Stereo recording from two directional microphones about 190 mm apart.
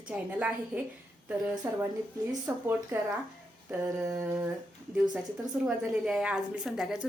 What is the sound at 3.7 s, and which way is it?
Speech, 15° right (ahead or behind).